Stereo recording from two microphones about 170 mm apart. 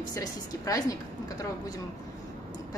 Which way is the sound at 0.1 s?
20° left (ahead or behind).